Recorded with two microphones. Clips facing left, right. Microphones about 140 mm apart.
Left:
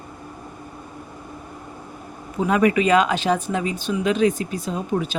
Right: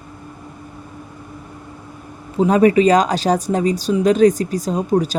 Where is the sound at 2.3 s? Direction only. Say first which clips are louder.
Right 6 dB; 35° right (ahead or behind).